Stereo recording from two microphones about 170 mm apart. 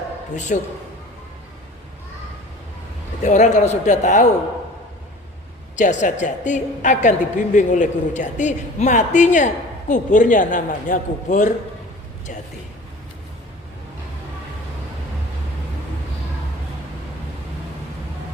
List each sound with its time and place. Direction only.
0.3 s a woman's voice: 45° left (ahead or behind)
3.2 s a woman's voice: 45° left (ahead or behind)
5.7 s a woman's voice: 45° left (ahead or behind)